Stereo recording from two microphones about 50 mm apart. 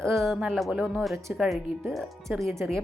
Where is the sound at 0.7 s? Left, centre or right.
Right.